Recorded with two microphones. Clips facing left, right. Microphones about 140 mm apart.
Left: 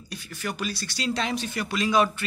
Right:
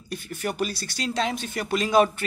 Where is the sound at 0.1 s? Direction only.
50° right (ahead or behind).